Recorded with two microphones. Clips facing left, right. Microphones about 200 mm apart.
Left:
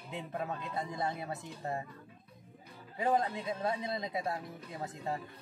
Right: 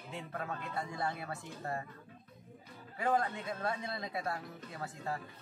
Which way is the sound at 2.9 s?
20° left (ahead or behind).